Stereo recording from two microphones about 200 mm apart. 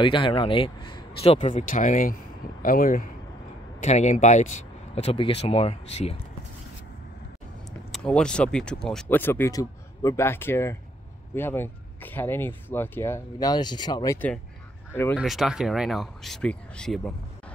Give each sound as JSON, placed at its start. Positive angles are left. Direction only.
{"t": 0.0, "sound": "speech", "side_deg": 25}
{"t": 3.8, "sound": "speech", "side_deg": 35}
{"t": 7.9, "sound": "speech", "side_deg": 5}
{"t": 15.1, "sound": "speech", "side_deg": 0}